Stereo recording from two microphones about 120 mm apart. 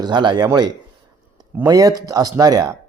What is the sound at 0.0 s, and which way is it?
Speech, 40° right (ahead or behind).